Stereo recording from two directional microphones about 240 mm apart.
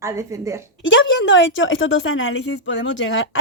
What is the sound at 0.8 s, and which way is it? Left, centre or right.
A woman's voice, left.